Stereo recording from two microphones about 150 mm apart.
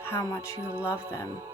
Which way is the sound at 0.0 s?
20° left (ahead or behind).